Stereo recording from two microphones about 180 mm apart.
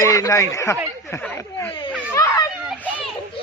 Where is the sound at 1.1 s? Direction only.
15° left (ahead or behind).